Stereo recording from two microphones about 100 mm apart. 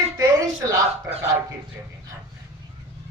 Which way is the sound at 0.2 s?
35° right (ahead or behind).